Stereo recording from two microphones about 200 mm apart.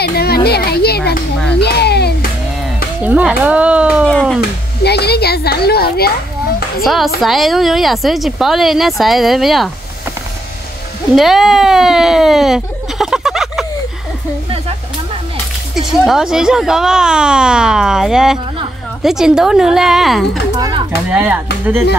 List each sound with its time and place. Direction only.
0.0 s a sound: 50° left (ahead or behind)
3.0 s speech: 5° right (ahead or behind)
4.1 s speech: 5° left (ahead or behind)
4.4 s speech: 55° left (ahead or behind)
6.8 s speech: centre (ahead or behind)
11.1 s speech: centre (ahead or behind)
15.7 s speech: centre (ahead or behind)
20.5 s speech: 20° right (ahead or behind)
21.1 s speech: 5° right (ahead or behind)